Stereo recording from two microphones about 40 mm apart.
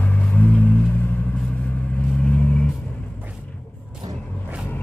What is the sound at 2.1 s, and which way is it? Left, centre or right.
Vehicle, left.